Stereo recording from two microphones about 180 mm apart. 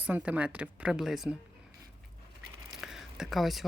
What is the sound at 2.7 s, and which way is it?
Whispering, centre (ahead or behind).